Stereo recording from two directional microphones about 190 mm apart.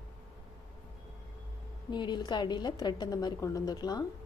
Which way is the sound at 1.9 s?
25° left (ahead or behind).